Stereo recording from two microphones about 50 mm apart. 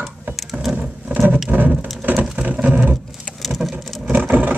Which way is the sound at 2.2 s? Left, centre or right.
Right.